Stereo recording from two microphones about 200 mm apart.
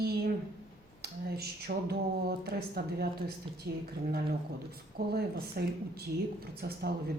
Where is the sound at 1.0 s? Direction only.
50° right (ahead or behind).